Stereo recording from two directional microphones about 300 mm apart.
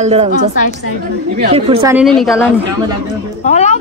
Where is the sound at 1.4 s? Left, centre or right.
Centre.